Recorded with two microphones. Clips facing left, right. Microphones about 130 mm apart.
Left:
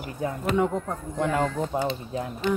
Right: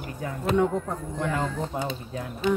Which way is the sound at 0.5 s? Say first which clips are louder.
Right 3 dB; centre (ahead or behind).